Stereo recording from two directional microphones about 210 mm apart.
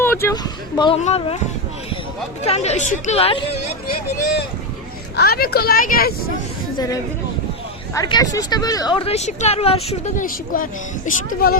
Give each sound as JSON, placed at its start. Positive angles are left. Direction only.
{"t": 0.0, "sound": "speech", "side_deg": 10}
{"t": 2.4, "sound": "speech", "side_deg": 30}
{"t": 5.1, "sound": "speech", "side_deg": 45}
{"t": 6.7, "sound": "a woman's voice", "side_deg": 15}